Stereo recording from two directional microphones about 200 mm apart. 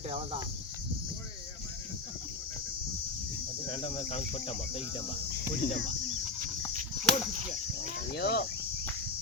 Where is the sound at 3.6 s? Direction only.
30° left (ahead or behind).